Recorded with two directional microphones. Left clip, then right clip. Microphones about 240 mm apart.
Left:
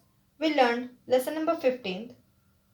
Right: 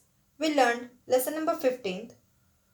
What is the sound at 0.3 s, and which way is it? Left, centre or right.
A woman's voice, right.